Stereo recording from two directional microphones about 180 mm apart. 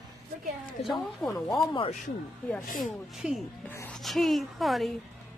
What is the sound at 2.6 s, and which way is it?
Speech, 50° left (ahead or behind).